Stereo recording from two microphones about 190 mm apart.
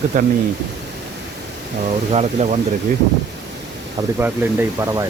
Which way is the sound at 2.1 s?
35° right (ahead or behind).